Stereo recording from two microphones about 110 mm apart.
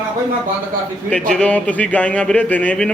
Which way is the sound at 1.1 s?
10° left (ahead or behind).